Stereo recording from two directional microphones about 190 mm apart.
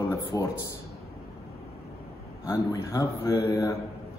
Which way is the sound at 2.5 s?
15° left (ahead or behind).